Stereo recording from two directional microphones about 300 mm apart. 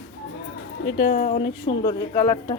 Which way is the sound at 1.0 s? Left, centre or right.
Left.